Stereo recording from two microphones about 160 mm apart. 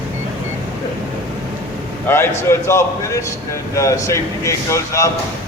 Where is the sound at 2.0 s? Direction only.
15° left (ahead or behind).